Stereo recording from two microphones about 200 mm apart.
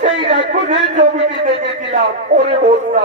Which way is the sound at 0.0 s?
35° right (ahead or behind).